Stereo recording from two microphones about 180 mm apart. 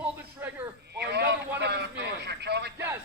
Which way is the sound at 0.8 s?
65° right (ahead or behind).